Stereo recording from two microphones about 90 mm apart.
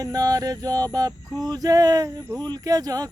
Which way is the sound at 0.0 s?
45° right (ahead or behind).